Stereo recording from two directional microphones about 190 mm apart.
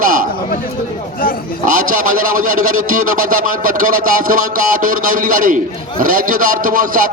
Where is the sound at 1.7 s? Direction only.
45° right (ahead or behind).